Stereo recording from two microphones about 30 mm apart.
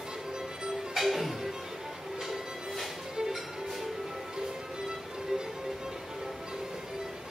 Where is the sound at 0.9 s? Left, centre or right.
Centre.